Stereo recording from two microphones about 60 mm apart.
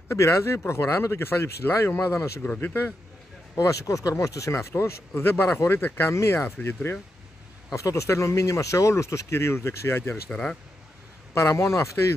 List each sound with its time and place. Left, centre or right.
0.1 s speech: left
2.6 s speech: left
3.5 s speech: left
4.5 s speech: left
6.1 s speech: left
7.7 s speech: left
10.3 s speech: centre
11.3 s speech: left